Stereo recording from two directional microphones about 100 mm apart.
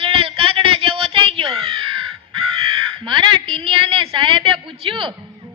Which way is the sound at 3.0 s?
55° right (ahead or behind).